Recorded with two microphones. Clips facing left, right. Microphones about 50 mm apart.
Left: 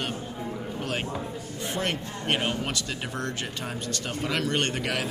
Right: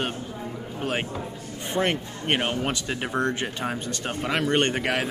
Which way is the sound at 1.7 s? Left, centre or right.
Right.